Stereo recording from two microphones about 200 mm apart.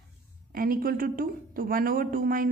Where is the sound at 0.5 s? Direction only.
45° right (ahead or behind).